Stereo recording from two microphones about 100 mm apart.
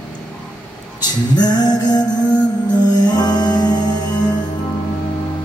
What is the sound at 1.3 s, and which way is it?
Music, 40° left (ahead or behind).